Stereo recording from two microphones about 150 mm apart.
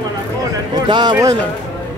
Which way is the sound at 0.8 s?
30° right (ahead or behind).